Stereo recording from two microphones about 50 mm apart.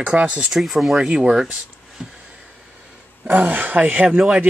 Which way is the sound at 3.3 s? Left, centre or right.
Right.